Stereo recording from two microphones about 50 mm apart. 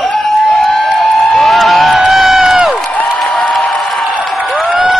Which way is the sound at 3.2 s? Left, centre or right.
Left.